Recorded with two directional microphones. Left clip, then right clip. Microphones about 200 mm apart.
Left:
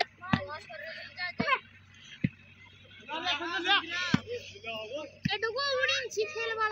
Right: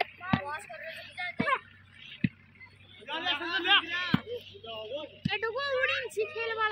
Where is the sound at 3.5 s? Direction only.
15° right (ahead or behind).